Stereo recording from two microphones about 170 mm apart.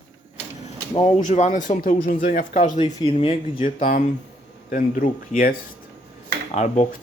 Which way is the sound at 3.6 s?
50° left (ahead or behind).